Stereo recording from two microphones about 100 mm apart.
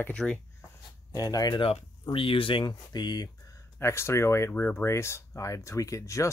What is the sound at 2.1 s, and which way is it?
Speech, 60° left (ahead or behind).